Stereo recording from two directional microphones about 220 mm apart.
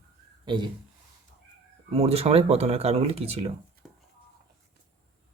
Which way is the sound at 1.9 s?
25° right (ahead or behind).